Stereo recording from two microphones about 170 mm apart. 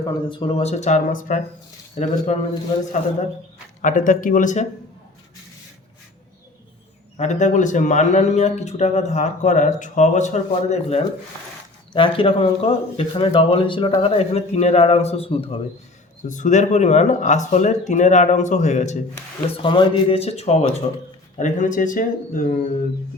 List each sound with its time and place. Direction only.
0.0 s a man's voice: 30° left (ahead or behind); by 2.1 s 45° left (ahead or behind)
3.8 s a man's voice: 50° left (ahead or behind)
7.2 s a man's voice: 45° left (ahead or behind)
16.2 s a man's voice: 50° left (ahead or behind)
19.5 s a man's voice: 30° left (ahead or behind); by 22.6 s 50° left (ahead or behind)